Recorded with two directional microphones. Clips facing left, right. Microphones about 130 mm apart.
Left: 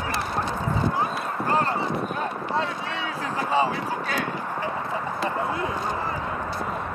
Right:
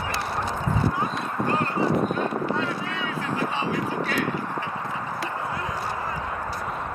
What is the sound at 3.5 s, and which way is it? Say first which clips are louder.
Vehicle: left 3 dB; 35° left (ahead or behind).